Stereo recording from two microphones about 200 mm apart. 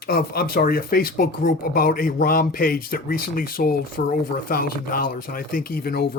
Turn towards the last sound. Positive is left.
turn(degrees=50)  # may be behind; listen again after turning